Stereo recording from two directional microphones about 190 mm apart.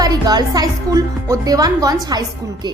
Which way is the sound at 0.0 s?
20° right (ahead or behind).